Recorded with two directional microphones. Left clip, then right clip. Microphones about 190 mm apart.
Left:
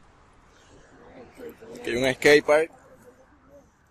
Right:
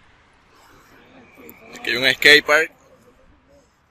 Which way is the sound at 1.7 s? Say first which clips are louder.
Right 7 dB; 20° left (ahead or behind).